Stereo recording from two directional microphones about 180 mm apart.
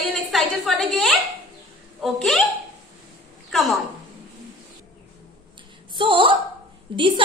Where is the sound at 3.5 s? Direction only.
Centre (ahead or behind).